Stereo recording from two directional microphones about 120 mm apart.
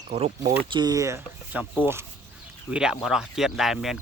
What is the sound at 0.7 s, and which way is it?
Speech, 35° right (ahead or behind).